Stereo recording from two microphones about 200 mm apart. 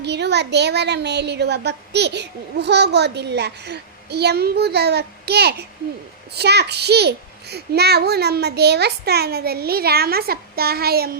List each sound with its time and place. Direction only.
0.0 s a woman's voice: 60° right (ahead or behind)